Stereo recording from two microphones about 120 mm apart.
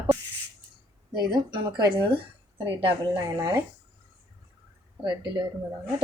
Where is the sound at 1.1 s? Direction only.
40° right (ahead or behind).